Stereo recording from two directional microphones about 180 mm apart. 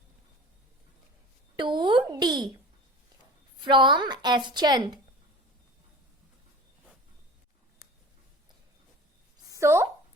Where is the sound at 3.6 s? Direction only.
25° right (ahead or behind).